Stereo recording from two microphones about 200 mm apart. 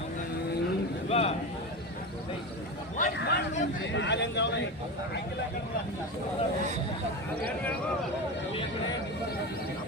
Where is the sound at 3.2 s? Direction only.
55° left (ahead or behind).